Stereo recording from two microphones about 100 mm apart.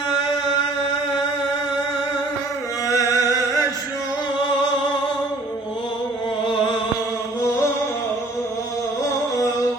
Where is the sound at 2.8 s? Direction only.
35° left (ahead or behind).